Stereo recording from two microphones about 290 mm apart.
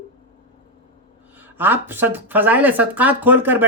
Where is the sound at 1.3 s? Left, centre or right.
Centre.